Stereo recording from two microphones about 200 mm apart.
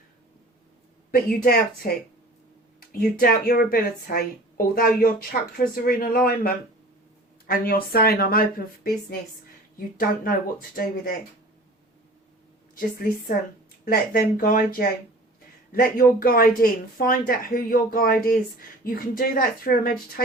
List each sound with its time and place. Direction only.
1.1 s a woman's voice: 45° left (ahead or behind)
2.9 s a woman's voice: 45° left (ahead or behind)
12.7 s a woman's voice: 45° left (ahead or behind)